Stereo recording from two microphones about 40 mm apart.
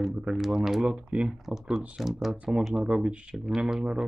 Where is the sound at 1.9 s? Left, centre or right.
Centre.